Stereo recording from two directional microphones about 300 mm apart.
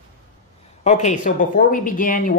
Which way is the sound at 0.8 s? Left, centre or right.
Left.